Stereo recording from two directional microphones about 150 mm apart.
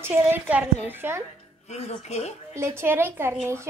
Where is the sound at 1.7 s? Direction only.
50° left (ahead or behind).